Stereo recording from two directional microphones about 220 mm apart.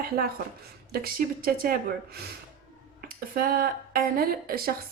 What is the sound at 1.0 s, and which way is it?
Speech, 40° right (ahead or behind).